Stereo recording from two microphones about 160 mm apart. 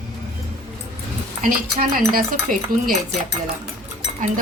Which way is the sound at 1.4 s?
60° right (ahead or behind).